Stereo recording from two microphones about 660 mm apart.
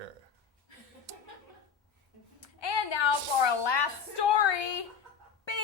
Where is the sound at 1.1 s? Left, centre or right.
Right.